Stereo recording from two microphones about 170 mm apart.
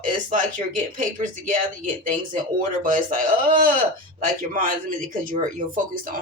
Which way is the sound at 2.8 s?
50° right (ahead or behind).